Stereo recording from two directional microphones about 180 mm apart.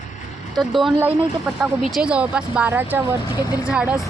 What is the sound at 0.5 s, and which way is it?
A woman's voice, centre (ahead or behind).